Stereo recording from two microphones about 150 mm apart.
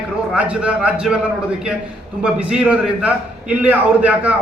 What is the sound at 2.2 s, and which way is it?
A man's voice, 5° right (ahead or behind).